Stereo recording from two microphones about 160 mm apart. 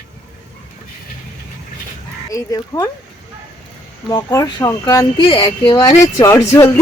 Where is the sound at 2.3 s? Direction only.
20° left (ahead or behind).